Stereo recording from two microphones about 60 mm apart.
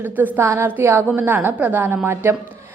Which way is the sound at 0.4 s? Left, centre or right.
Right.